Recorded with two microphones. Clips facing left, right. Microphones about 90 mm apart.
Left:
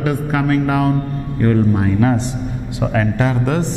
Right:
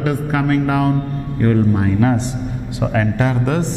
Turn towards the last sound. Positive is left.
turn(degrees=10)  # may be behind; listen again after turning